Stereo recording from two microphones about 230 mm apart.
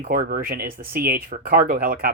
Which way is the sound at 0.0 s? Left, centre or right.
Right.